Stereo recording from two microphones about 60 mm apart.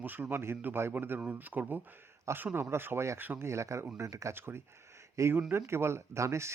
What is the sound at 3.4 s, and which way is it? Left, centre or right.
Speech, right.